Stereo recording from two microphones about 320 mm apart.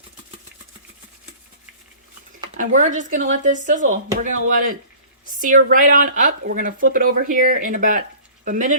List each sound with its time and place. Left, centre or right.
2.6 s speech: right